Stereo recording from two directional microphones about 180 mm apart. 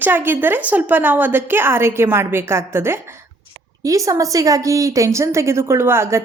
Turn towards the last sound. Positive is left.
turn(degrees=-15)  # may be behind; listen again after turning